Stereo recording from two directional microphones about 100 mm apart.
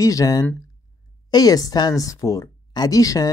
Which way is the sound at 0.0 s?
35° left (ahead or behind).